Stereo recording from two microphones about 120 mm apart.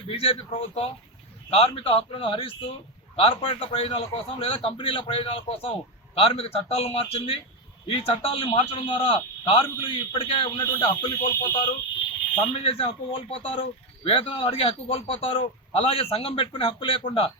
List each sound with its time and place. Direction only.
0.1 s a man's voice: 50° left (ahead or behind)
12.6 s a man's voice: 50° left (ahead or behind)